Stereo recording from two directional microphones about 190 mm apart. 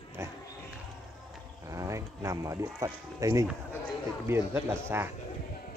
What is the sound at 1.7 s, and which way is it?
Speech, 15° right (ahead or behind).